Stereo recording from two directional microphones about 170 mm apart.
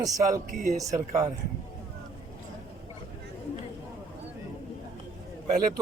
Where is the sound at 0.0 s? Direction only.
20° right (ahead or behind).